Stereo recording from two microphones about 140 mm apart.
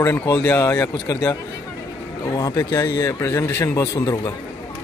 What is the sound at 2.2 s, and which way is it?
A man's voice, 25° left (ahead or behind).